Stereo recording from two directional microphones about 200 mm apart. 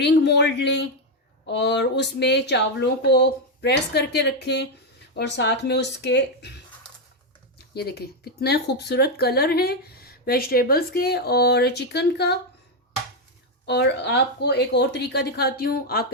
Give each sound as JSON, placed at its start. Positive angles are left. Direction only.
{"t": 0.0, "sound": "speech", "side_deg": 55}
{"t": 7.7, "sound": "speech", "side_deg": 55}
{"t": 13.7, "sound": "speech", "side_deg": 55}